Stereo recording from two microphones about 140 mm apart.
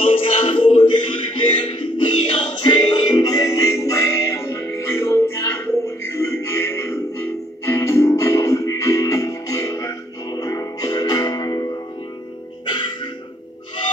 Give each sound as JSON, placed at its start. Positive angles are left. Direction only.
{"t": 0.0, "sound": "music", "side_deg": 40}